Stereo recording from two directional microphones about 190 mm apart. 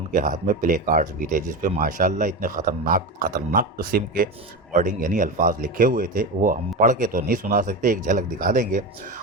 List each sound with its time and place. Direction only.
0.1 s a man's voice: 45° right (ahead or behind)